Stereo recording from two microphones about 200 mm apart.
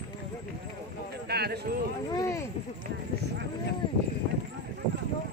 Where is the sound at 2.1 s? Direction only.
15° left (ahead or behind).